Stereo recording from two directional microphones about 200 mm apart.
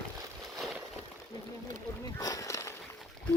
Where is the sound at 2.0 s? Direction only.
15° left (ahead or behind).